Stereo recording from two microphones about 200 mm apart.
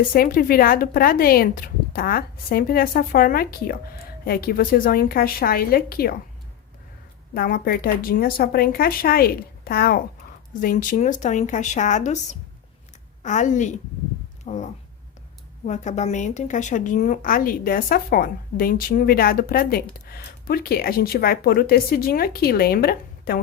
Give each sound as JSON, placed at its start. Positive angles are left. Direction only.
{"t": 0.1, "sound": "a woman's voice", "side_deg": 50}
{"t": 7.3, "sound": "a woman's voice", "side_deg": 50}